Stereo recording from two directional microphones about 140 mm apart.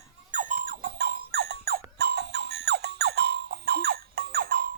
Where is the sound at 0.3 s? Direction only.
65° right (ahead or behind); by 1.8 s 90° right.